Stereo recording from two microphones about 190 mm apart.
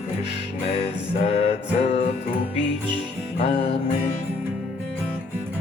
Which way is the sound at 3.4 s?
30° left (ahead or behind).